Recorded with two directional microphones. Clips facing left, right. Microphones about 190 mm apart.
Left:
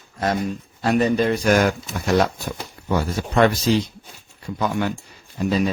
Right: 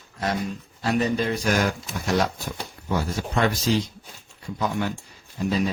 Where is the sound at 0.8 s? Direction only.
55° left (ahead or behind).